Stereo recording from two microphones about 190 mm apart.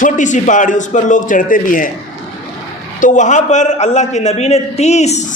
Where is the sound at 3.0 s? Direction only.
40° left (ahead or behind).